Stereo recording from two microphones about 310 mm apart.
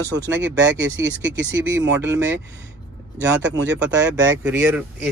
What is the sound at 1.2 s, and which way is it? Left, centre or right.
Speech, right.